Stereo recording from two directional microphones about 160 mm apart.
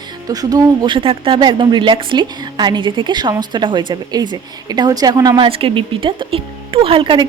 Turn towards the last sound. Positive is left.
turn(degrees=-30)  # may be behind; listen again after turning